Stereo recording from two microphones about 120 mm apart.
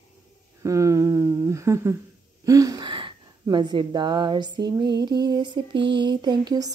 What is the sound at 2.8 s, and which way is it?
A woman's voice, 40° right (ahead or behind).